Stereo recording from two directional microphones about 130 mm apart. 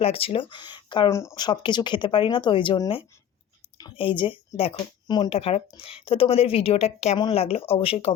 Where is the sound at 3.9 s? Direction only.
40° left (ahead or behind).